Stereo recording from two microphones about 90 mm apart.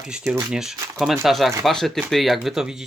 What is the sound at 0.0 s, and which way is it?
Speech, 10° right (ahead or behind).